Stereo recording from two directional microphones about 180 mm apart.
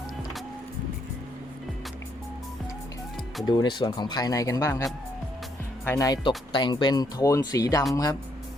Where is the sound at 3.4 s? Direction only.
25° left (ahead or behind).